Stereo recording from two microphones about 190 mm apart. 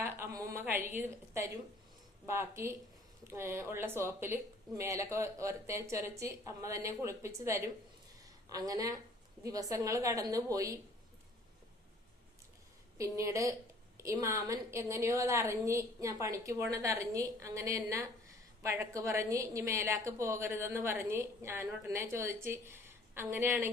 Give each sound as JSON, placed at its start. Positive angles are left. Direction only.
{"t": 0.0, "sound": "a woman's voice", "side_deg": -15}
{"t": 13.0, "sound": "a woman's voice", "side_deg": -15}